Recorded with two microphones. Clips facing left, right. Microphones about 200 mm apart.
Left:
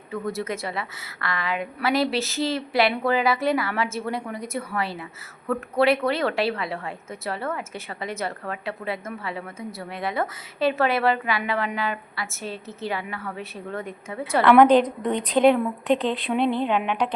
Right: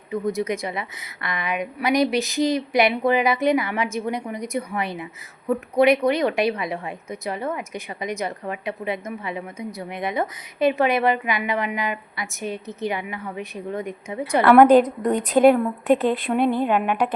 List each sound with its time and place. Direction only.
0.1 s a woman's voice: 15° right (ahead or behind)
14.6 s a woman's voice: 45° right (ahead or behind)
15.4 s a woman's voice: 5° right (ahead or behind)
16.0 s a woman's voice: 50° right (ahead or behind)
16.6 s a woman's voice: 5° right (ahead or behind)